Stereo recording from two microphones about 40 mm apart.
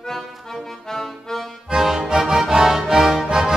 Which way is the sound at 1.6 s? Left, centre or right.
Centre.